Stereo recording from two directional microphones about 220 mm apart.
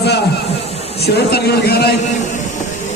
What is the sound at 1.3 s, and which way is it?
Speech, 45° left (ahead or behind).